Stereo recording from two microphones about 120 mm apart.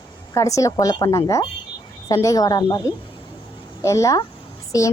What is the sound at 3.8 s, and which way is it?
A woman's voice, 25° left (ahead or behind).